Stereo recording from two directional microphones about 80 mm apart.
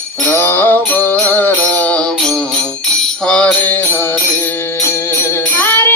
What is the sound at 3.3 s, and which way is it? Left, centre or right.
Music, centre.